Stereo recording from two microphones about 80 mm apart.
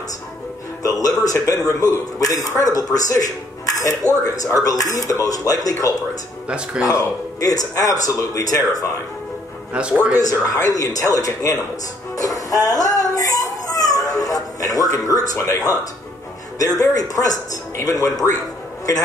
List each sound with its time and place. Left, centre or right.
1.0 s a man's voice: left
9.8 s speech: centre
10.1 s a man's voice: left
12.2 s music: left
16.5 s a man's voice: left